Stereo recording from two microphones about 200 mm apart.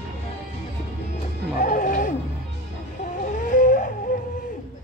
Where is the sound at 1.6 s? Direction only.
45° left (ahead or behind).